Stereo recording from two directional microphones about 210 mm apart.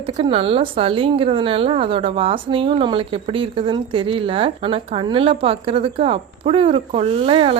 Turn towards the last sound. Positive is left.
turn(degrees=-25)  # may be behind; listen again after turning